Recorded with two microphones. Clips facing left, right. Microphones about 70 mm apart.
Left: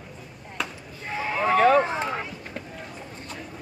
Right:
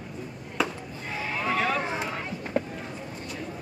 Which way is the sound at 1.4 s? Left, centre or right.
Left.